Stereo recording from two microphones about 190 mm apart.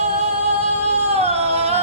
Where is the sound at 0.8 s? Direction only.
35° right (ahead or behind).